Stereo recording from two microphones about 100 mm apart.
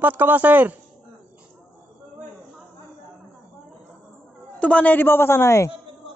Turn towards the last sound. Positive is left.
turn(degrees=25)  # may be behind; listen again after turning